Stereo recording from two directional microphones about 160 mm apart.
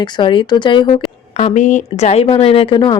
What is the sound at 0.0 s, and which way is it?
Speech, 30° left (ahead or behind).